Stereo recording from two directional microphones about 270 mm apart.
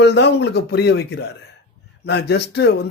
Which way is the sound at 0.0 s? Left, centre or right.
Left.